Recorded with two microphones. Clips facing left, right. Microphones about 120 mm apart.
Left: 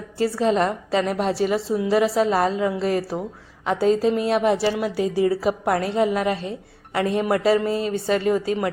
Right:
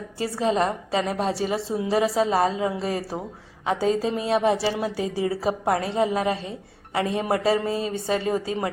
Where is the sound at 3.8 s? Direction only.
40° left (ahead or behind).